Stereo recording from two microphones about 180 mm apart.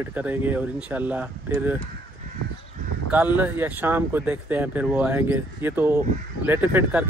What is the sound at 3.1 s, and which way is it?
Speech, 10° right (ahead or behind).